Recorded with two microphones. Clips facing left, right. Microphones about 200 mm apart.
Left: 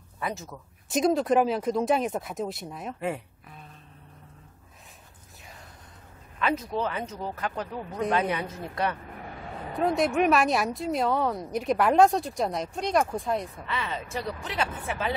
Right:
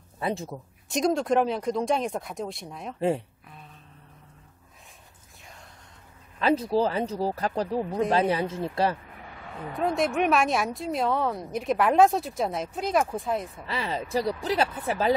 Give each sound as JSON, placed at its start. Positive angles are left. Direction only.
{"t": 0.2, "sound": "speech", "side_deg": -30}
{"t": 0.8, "sound": "speech", "side_deg": 0}
{"t": 6.4, "sound": "speech", "side_deg": -30}
{"t": 9.8, "sound": "speech", "side_deg": 0}
{"t": 13.7, "sound": "speech", "side_deg": -35}